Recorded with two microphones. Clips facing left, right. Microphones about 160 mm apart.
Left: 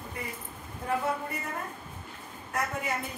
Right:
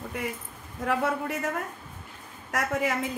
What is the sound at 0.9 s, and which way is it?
Speech, 90° right.